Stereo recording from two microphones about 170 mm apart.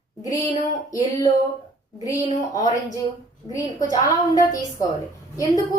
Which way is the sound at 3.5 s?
20° left (ahead or behind).